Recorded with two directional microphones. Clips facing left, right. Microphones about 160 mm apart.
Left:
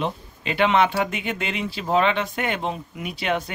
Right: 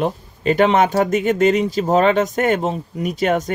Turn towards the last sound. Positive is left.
turn(degrees=-45)  # may be behind; listen again after turning